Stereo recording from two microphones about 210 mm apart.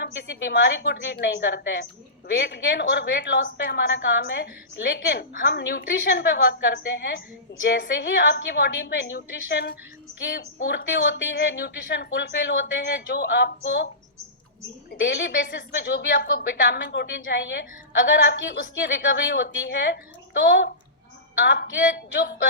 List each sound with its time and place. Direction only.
0.0 s a woman's voice: 55° left (ahead or behind)
21.4 s a woman's voice: 55° left (ahead or behind)